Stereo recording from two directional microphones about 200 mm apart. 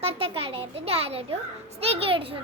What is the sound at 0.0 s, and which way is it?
A child's voice, 30° right (ahead or behind).